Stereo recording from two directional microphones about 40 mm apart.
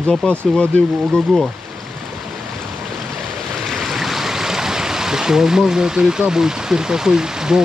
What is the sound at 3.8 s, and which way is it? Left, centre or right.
Stream, centre.